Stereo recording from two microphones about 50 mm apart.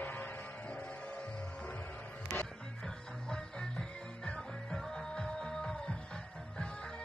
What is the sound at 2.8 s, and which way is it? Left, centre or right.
Music, centre.